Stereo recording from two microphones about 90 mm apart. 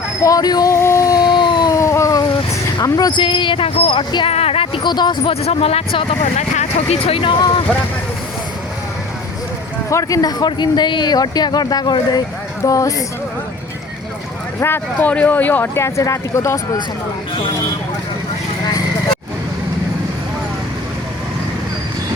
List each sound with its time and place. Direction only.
0.2 s speech: 40° left (ahead or behind)
0.7 s a sound: 30° left (ahead or behind); by 1.7 s 60° left (ahead or behind)
1.7 s a sound: 35° left (ahead or behind)
2.8 s speech: 40° left (ahead or behind)
3.1 s speech: 60° left (ahead or behind); by 4.0 s 90° left
4.1 s a sound: 75° left (ahead or behind)
4.9 s speech: 55° left (ahead or behind)
5.3 s speech: 90° left
9.9 s speech: 40° left (ahead or behind)
14.6 s speech: 20° left (ahead or behind)